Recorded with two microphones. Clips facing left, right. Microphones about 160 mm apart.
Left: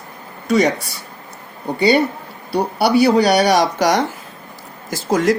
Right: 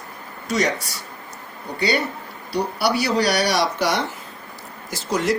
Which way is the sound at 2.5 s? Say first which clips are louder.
Left 6 dB; 55° left (ahead or behind).